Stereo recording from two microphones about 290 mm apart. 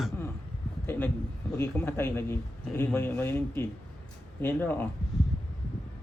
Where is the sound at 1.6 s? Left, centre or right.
Centre.